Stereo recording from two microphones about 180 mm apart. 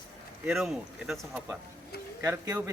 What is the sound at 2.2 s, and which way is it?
Speech, 15° right (ahead or behind).